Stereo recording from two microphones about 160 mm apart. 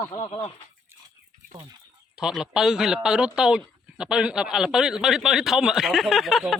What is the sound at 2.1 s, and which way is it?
Speech, 5° right (ahead or behind).